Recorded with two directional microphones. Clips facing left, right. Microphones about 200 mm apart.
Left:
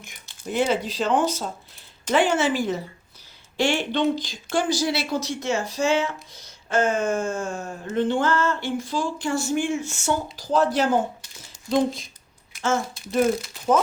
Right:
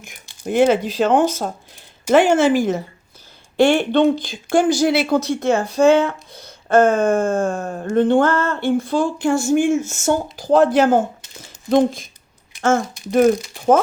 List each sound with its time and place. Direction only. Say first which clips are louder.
0.0 s a sound: right 4 dB; 10° right (ahead or behind)
0.4 s speech: right 8 dB; 55° right (ahead or behind)
3.6 s speech: right 8 dB; 55° right (ahead or behind)